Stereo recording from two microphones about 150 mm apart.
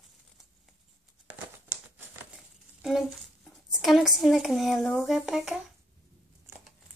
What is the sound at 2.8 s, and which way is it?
Speech, centre (ahead or behind).